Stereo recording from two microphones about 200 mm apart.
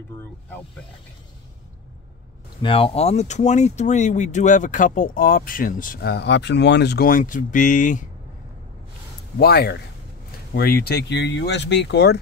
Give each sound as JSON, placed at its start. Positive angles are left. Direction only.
{"t": 2.6, "sound": "speech", "side_deg": 25}
{"t": 9.4, "sound": "speech", "side_deg": 50}